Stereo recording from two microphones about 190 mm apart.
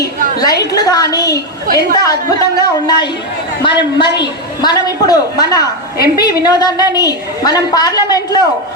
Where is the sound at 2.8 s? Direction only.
20° left (ahead or behind).